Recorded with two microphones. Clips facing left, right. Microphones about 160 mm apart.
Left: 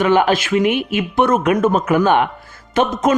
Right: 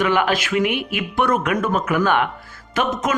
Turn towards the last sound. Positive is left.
turn(degrees=25)  # may be behind; listen again after turning